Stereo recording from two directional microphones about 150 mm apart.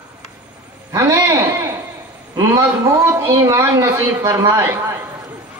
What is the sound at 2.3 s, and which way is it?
Speech, 20° right (ahead or behind).